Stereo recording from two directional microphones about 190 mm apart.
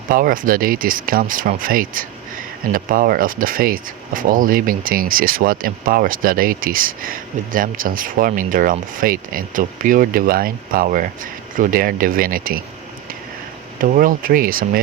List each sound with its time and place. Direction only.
0.1 s speech: 45° right (ahead or behind)
13.8 s speech: 45° right (ahead or behind)